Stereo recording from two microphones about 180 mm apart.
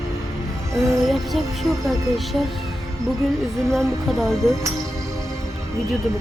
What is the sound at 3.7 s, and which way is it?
Speech, centre (ahead or behind).